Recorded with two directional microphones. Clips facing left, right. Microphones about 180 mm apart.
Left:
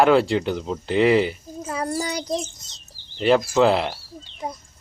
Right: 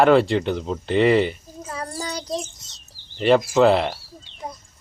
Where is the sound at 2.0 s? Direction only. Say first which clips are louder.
Left 3 dB; 15° left (ahead or behind).